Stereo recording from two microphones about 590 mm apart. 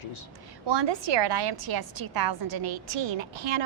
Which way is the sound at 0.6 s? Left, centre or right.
Right.